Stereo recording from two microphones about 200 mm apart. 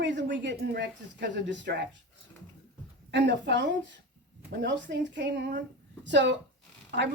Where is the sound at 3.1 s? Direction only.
60° right (ahead or behind).